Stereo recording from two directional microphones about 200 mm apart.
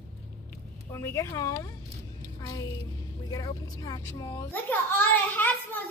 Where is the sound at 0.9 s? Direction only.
15° left (ahead or behind).